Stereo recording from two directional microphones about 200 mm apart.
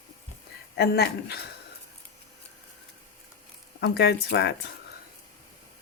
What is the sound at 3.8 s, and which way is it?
Speech, 60° left (ahead or behind).